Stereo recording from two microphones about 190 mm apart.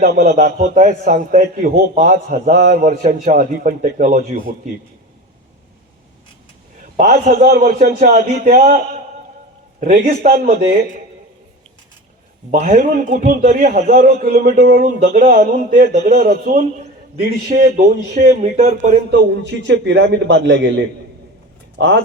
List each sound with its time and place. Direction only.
0.0 s a man's voice: 50° right (ahead or behind)
0.3 s a man's voice: 40° right (ahead or behind)
7.0 s a man's voice: 55° right (ahead or behind)
9.8 s a man's voice: 45° right (ahead or behind)
12.7 s a man's voice: 40° right (ahead or behind)
19.4 s a man's voice: 70° right (ahead or behind)